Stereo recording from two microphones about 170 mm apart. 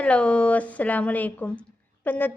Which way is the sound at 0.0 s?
5° left (ahead or behind).